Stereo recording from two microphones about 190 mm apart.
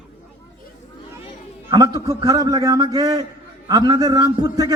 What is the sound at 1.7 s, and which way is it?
A man's voice, 25° right (ahead or behind).